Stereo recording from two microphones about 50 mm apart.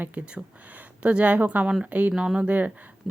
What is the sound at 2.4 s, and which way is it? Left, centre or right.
Speech, right.